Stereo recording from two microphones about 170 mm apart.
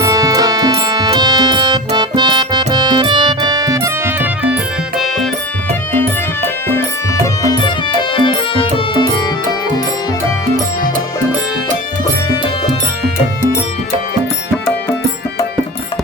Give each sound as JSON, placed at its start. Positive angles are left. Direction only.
{"t": 0.0, "sound": "music", "side_deg": -20}
{"t": 4.9, "sound": "music", "side_deg": 0}
{"t": 7.4, "sound": "music", "side_deg": 25}